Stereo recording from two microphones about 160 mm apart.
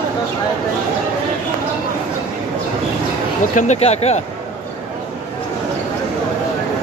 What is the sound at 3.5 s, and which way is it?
Speech, 45° left (ahead or behind).